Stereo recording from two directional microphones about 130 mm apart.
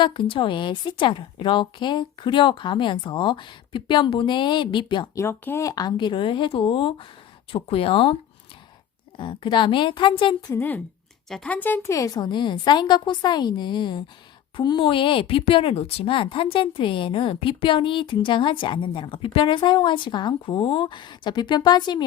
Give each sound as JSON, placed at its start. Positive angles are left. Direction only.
{"t": 0.0, "sound": "speech", "side_deg": 40}
{"t": 5.1, "sound": "speech", "side_deg": 20}
{"t": 9.1, "sound": "speech", "side_deg": 40}
{"t": 10.5, "sound": "a woman's voice", "side_deg": 15}